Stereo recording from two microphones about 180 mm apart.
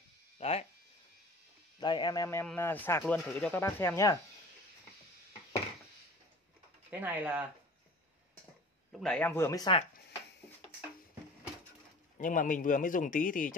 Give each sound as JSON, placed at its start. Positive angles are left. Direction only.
{"t": 0.4, "sound": "speech", "side_deg": 35}
{"t": 1.8, "sound": "speech", "side_deg": 25}
{"t": 6.9, "sound": "speech", "side_deg": -10}
{"t": 8.9, "sound": "speech", "side_deg": 5}
{"t": 12.2, "sound": "speech", "side_deg": 45}